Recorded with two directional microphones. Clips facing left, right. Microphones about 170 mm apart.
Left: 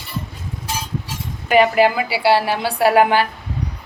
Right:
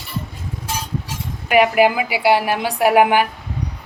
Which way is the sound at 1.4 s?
10° right (ahead or behind).